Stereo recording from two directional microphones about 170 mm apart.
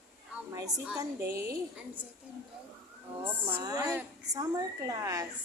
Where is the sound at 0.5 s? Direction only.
20° right (ahead or behind).